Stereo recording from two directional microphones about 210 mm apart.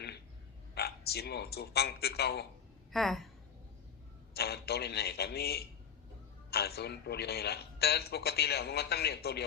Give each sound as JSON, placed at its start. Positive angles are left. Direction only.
{"t": 0.7, "sound": "speech", "side_deg": 50}
{"t": 2.9, "sound": "a woman's voice", "side_deg": 0}
{"t": 4.4, "sound": "a man's voice", "side_deg": 50}